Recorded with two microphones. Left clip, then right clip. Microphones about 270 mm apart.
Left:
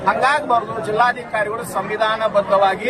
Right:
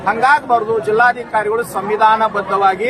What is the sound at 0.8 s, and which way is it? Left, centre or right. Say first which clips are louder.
Speech: right 3 dB; centre.